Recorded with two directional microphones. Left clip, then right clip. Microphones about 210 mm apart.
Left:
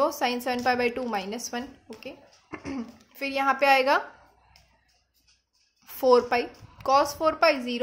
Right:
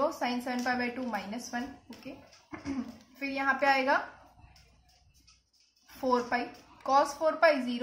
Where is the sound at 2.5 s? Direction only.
45° left (ahead or behind).